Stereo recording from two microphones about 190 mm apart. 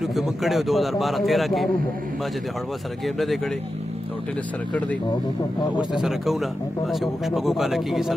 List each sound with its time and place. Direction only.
0.0 s speech: centre (ahead or behind)
5.8 s speech: centre (ahead or behind)